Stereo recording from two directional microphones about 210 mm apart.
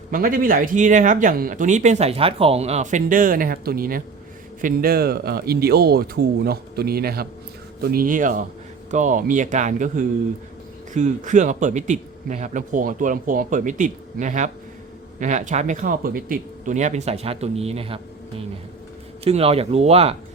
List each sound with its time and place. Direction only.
0.1 s speech: 40° right (ahead or behind)
19.2 s speech: 30° right (ahead or behind)